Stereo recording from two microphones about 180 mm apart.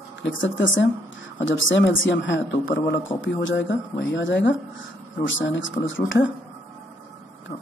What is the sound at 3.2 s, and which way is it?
Speech, 90° left.